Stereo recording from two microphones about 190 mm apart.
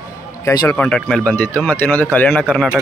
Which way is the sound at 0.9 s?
5° left (ahead or behind).